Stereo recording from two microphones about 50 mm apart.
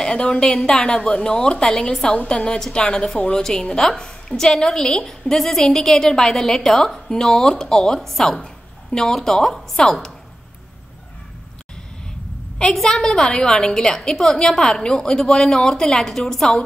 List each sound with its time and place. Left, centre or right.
0.0 s a woman's voice: centre
12.7 s a woman's voice: centre